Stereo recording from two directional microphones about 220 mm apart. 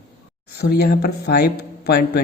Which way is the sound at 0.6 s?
45° left (ahead or behind).